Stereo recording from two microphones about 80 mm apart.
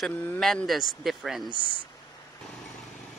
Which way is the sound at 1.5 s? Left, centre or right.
Right.